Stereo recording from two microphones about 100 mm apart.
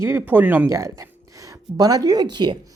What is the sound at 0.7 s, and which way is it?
Speech, 30° right (ahead or behind).